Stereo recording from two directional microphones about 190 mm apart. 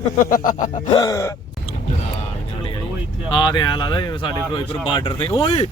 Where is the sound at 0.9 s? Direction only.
20° left (ahead or behind).